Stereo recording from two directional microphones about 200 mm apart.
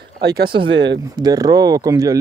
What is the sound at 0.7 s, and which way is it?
Speech, 65° right (ahead or behind).